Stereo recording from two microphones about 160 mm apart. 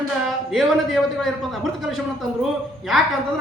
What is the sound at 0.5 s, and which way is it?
A man's voice, centre (ahead or behind).